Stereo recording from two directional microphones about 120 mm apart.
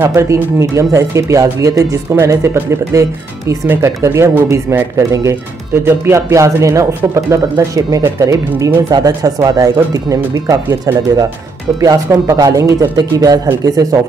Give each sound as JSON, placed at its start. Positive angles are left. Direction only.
{"t": 0.0, "sound": "speech", "side_deg": -25}